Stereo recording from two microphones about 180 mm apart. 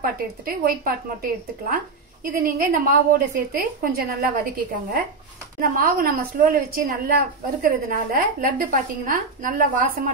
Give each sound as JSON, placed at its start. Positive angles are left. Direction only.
{"t": 0.0, "sound": "a woman's voice", "side_deg": -55}
{"t": 5.6, "sound": "a woman's voice", "side_deg": -55}